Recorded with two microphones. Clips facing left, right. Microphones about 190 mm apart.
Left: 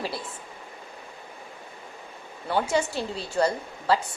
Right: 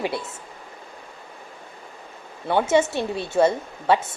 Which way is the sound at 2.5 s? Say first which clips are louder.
Right 6 dB; 25° right (ahead or behind).